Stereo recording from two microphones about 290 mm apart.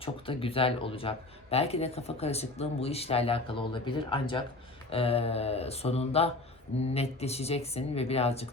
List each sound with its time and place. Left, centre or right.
0.0 s speech: centre